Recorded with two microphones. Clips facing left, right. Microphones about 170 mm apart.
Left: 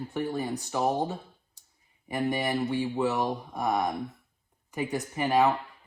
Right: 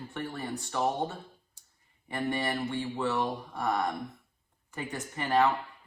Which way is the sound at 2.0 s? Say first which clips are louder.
Left 3 dB; 15° left (ahead or behind).